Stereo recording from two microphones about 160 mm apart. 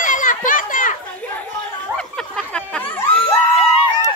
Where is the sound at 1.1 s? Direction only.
10° left (ahead or behind).